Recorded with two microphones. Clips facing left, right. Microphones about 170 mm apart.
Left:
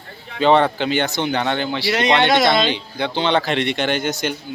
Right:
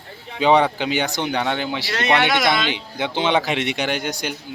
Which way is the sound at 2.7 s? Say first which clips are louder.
Left 2 dB; 15° right (ahead or behind).